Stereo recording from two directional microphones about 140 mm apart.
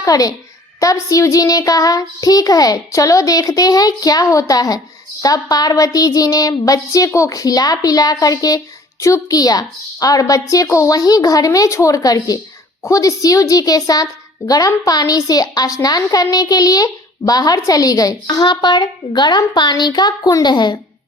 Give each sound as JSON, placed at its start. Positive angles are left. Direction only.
{"t": 0.0, "sound": "speech", "side_deg": 25}